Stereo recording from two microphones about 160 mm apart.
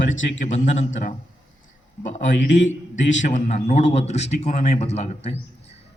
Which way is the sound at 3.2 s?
50° left (ahead or behind).